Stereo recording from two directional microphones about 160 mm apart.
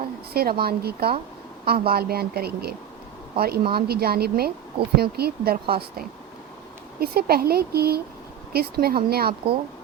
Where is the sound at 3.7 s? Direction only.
75° right (ahead or behind).